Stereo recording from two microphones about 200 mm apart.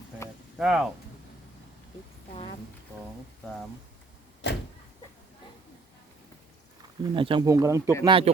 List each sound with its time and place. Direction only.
0.6 s speech: 5° right (ahead or behind)
7.0 s speech: 25° right (ahead or behind)
8.0 s speech: 25° right (ahead or behind)